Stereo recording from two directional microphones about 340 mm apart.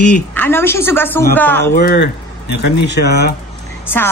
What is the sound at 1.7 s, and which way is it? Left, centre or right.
Speech, left.